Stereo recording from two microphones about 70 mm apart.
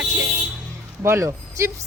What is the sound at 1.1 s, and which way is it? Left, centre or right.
Speech, right.